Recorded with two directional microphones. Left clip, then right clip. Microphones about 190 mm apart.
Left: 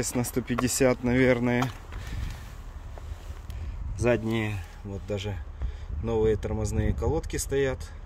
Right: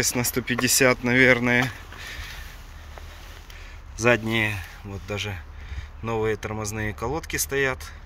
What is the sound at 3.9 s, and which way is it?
Speech, 5° left (ahead or behind).